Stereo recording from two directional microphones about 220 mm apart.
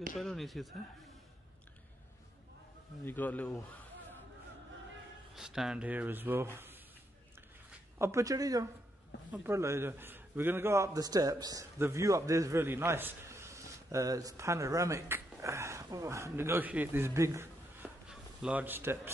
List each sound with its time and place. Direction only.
0.2 s speech: centre (ahead or behind)
3.1 s speech: 5° left (ahead or behind)
5.3 s speech: centre (ahead or behind)
8.0 s a man's voice: 15° right (ahead or behind)